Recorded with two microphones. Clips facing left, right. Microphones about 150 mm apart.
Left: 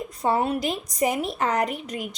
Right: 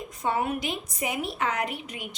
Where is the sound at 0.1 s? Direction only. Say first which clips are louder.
Left 4 dB; 35° left (ahead or behind).